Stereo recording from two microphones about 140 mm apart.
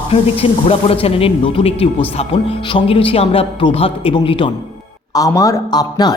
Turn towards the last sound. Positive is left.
turn(degrees=30)  # may be behind; listen again after turning